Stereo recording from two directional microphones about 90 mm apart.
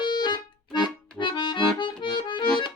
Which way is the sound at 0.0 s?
55° left (ahead or behind).